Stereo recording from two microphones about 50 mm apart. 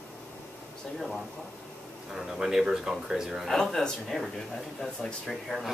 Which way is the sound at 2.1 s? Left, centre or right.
Centre.